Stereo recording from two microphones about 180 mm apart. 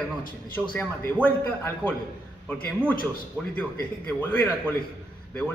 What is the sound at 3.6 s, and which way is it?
Speech, 10° left (ahead or behind).